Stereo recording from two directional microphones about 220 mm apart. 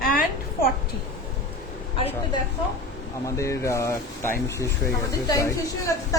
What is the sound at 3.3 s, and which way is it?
Speech, 15° left (ahead or behind).